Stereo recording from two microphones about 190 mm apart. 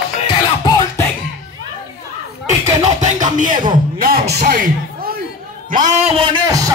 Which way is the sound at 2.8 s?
40° right (ahead or behind).